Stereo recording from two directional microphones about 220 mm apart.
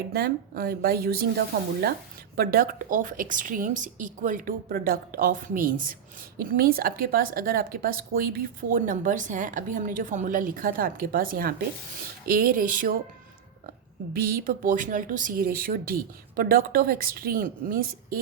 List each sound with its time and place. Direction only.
0.1 s a woman's voice: 45° right (ahead or behind)
14.1 s a woman's voice: 40° right (ahead or behind)